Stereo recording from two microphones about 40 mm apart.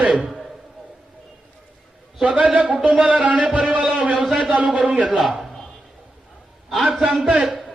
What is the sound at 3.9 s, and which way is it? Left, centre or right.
Speech, right.